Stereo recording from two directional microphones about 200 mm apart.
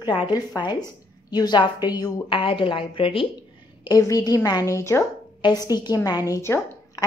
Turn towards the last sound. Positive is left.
turn(degrees=15)  # may be behind; listen again after turning